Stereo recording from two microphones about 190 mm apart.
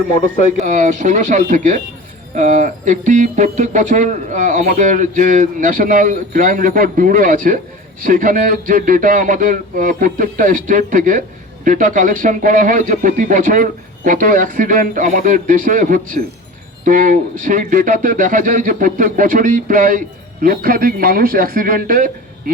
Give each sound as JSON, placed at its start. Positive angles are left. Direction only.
{"t": 0.5, "sound": "speech", "side_deg": -40}